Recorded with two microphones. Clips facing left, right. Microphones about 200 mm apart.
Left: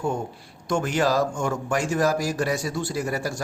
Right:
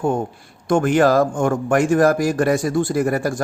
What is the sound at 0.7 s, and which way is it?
Speech, 55° right (ahead or behind).